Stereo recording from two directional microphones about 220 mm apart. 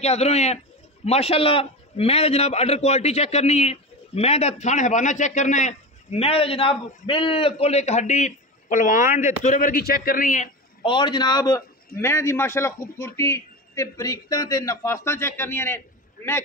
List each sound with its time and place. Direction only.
0.0 s a man's voice: 30° left (ahead or behind)
10.8 s a man's voice: 20° left (ahead or behind)